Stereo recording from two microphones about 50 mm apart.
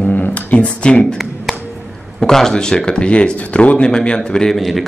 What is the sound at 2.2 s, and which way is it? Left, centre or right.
Speech, centre.